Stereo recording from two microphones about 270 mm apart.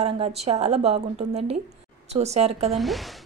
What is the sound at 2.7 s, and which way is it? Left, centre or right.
Speech, centre.